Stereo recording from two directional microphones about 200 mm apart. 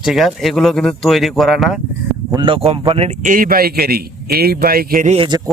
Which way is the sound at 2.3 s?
25° right (ahead or behind).